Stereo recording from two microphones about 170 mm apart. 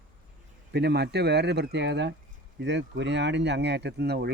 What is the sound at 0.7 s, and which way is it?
Speech, 80° right.